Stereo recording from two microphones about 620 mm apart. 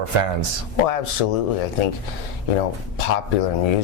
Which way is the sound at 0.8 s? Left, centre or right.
Left.